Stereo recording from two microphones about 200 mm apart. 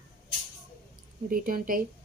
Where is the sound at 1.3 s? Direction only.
45° right (ahead or behind).